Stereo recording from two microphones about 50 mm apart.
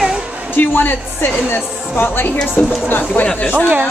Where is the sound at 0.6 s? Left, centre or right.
Left.